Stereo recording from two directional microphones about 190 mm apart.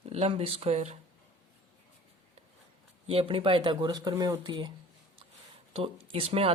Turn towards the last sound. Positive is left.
turn(degrees=-30)  # may be behind; listen again after turning